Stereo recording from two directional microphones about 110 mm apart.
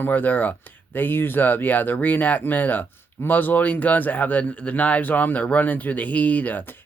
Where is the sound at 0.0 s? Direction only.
15° left (ahead or behind).